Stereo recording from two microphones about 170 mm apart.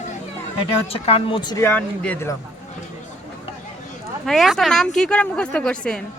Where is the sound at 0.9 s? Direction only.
35° left (ahead or behind).